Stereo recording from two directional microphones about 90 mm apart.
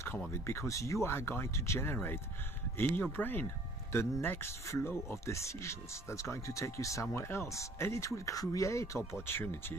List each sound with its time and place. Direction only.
0.3 s speech: 30° left (ahead or behind)